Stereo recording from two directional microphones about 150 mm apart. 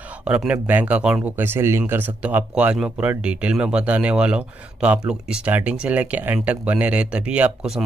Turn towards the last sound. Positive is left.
turn(degrees=-5)  # may be behind; listen again after turning